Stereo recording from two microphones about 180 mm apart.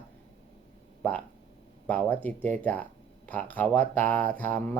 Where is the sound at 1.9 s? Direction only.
10° left (ahead or behind).